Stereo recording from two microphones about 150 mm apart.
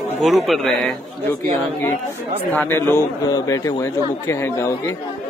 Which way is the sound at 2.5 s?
15° left (ahead or behind).